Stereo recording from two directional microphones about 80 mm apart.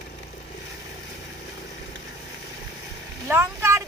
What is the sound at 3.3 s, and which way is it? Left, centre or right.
Vehicle, right.